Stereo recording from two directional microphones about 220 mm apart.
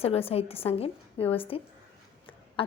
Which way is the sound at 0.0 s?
25° left (ahead or behind).